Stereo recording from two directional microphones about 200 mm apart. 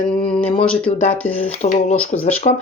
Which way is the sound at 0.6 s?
5° left (ahead or behind).